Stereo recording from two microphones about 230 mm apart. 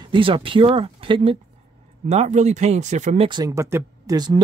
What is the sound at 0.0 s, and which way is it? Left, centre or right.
Speech, right.